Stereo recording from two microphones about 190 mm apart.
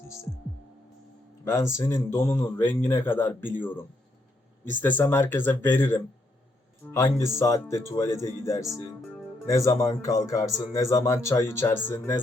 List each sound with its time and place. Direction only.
1.5 s speech: 15° left (ahead or behind)
8.6 s speech: centre (ahead or behind)
9.5 s speech: 20° left (ahead or behind)